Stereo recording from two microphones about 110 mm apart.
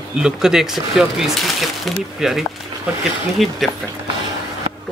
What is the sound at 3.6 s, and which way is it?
Speech, centre (ahead or behind).